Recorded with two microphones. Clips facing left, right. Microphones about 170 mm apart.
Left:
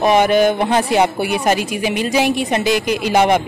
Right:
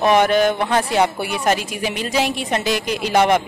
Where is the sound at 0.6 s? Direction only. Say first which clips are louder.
Left 3 dB; 20° left (ahead or behind).